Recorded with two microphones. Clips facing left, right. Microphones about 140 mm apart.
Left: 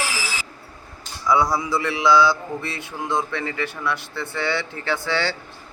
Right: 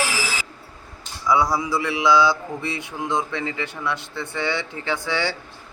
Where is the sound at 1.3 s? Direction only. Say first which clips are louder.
Even; 15° right (ahead or behind).